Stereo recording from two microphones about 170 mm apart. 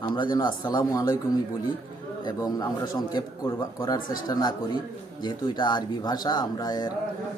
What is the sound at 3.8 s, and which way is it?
A man's voice, 20° left (ahead or behind).